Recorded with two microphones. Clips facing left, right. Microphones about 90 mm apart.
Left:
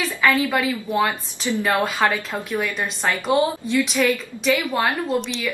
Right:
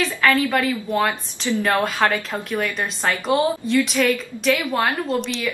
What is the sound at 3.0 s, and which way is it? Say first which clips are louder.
Speech: even; 5° left (ahead or behind).